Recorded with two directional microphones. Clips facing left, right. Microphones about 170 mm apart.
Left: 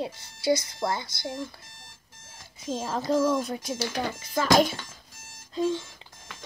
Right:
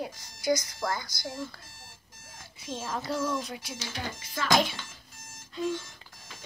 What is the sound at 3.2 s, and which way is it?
Speech, 50° left (ahead or behind).